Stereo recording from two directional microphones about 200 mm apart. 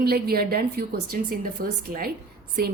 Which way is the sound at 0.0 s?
50° right (ahead or behind).